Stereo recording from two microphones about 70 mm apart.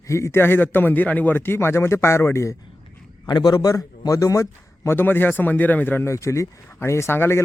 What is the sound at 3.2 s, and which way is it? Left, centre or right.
A man's voice, left.